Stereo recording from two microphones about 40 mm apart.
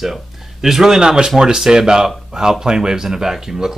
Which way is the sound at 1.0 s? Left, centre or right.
Centre.